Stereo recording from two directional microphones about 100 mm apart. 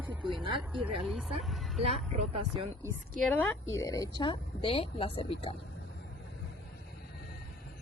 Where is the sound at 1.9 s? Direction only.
90° right.